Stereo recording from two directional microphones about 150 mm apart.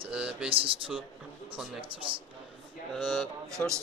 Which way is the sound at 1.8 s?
35° right (ahead or behind).